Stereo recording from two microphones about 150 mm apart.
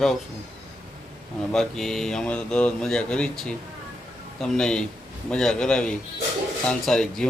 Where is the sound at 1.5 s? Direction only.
Centre (ahead or behind).